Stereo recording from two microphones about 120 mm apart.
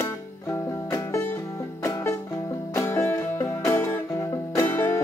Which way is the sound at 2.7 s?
20° left (ahead or behind).